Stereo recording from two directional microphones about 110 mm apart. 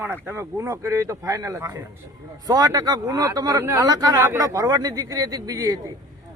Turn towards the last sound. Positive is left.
turn(degrees=-35)  # may be behind; listen again after turning